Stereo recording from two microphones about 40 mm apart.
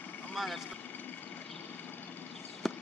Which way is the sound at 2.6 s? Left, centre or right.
Centre.